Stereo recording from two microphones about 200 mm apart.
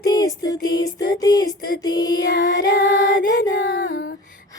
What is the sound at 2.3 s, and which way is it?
Music, 45° left (ahead or behind).